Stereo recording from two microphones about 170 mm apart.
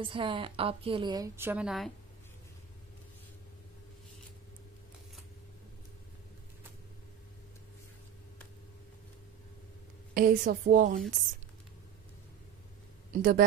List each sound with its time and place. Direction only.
0.0 s a woman's voice: 30° right (ahead or behind); by 1.9 s 5° right (ahead or behind)
10.1 s a woman's voice: 55° right (ahead or behind)
13.1 s speech: 55° right (ahead or behind)